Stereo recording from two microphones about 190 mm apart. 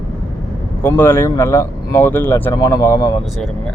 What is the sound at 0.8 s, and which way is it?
Speech, 10° left (ahead or behind).